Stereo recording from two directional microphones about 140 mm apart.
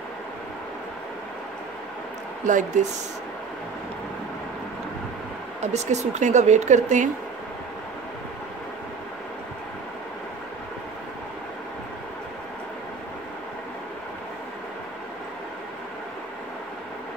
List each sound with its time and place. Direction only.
2.4 s speech: 65° right (ahead or behind)
5.6 s speech: 55° right (ahead or behind)